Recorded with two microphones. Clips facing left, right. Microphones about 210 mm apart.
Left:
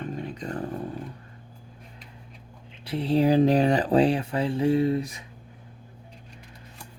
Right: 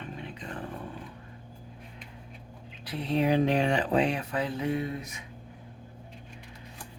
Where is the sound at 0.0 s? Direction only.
40° left (ahead or behind).